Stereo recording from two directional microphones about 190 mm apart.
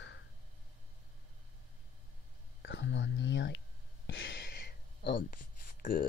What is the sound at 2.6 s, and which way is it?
Whispering, 70° left (ahead or behind).